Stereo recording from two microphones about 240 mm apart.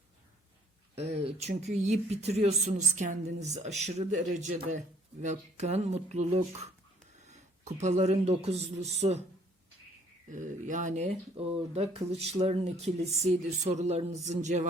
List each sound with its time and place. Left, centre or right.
0.9 s speech: right
10.2 s speech: right